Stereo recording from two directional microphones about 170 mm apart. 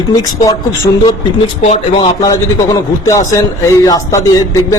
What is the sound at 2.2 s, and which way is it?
A man's voice, 20° left (ahead or behind).